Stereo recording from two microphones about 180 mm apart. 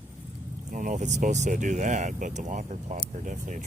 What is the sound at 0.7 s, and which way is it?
Speech, 45° right (ahead or behind).